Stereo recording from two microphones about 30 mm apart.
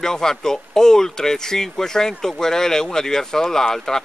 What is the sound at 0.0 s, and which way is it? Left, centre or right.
Speech, centre.